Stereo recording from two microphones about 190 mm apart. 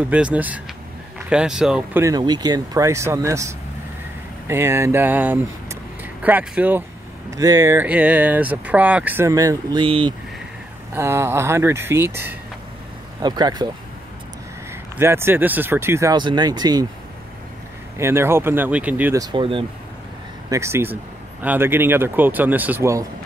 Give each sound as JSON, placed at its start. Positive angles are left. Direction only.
{"t": 0.1, "sound": "speech", "side_deg": -5}
{"t": 2.0, "sound": "speech", "side_deg": -20}
{"t": 4.5, "sound": "speech", "side_deg": -15}
{"t": 10.9, "sound": "speech", "side_deg": -15}
{"t": 15.0, "sound": "speech", "side_deg": -10}
{"t": 17.9, "sound": "speech", "side_deg": -15}
{"t": 20.4, "sound": "speech", "side_deg": -15}